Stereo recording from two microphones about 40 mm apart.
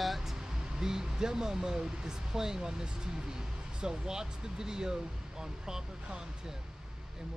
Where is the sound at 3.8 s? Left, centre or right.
Centre.